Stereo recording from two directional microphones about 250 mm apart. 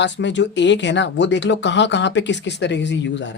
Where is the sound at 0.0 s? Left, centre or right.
Left.